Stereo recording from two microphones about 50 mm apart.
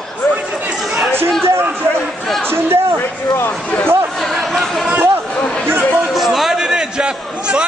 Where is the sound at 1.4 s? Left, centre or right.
Right.